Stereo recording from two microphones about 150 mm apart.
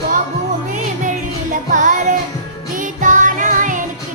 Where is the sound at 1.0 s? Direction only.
60° right (ahead or behind).